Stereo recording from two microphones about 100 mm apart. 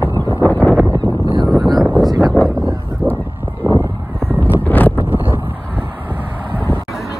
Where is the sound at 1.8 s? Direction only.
Centre (ahead or behind).